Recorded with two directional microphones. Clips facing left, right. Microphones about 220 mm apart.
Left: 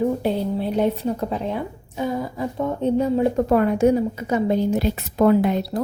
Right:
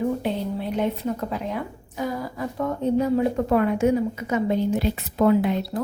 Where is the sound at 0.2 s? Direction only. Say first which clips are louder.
Left 4 dB; 35° left (ahead or behind).